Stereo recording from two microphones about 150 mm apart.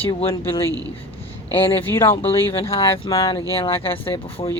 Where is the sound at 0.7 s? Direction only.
25° right (ahead or behind).